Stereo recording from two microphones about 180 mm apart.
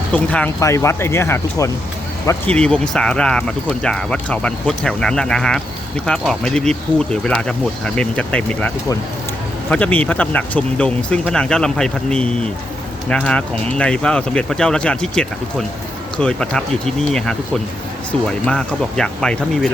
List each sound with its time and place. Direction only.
0.1 s speech: 5° left (ahead or behind)